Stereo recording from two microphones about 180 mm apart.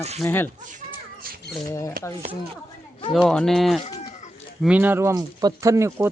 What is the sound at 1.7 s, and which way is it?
Speech, 15° left (ahead or behind).